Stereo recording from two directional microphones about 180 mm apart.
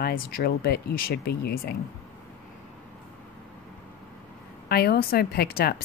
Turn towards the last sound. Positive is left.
turn(degrees=60)  # may be behind; listen again after turning